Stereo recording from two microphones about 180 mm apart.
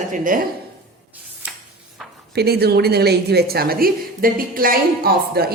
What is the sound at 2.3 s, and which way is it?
A woman's voice, 60° right (ahead or behind).